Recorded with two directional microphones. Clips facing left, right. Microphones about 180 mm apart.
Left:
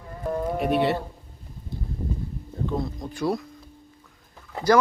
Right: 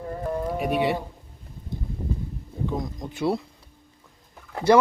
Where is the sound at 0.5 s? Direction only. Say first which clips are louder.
Left 2 dB; 10° right (ahead or behind).